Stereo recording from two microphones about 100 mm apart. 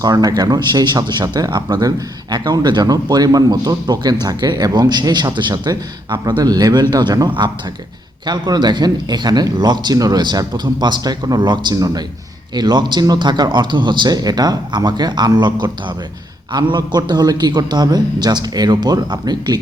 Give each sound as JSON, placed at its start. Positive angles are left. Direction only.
{"t": 0.0, "sound": "a man's voice", "side_deg": -40}
{"t": 8.3, "sound": "a man's voice", "side_deg": -45}